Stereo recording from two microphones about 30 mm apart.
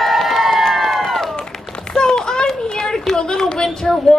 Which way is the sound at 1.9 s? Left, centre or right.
Left.